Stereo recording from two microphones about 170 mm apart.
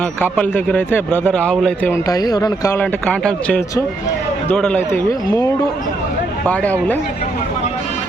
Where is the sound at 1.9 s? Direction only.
20° left (ahead or behind).